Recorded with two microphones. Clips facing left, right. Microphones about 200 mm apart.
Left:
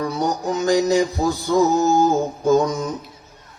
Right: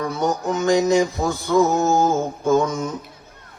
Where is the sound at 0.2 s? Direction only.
35° left (ahead or behind).